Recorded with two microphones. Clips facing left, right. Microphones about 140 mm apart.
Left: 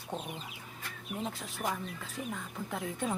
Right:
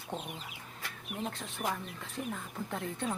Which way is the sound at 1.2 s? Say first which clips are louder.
Even; 5° left (ahead or behind).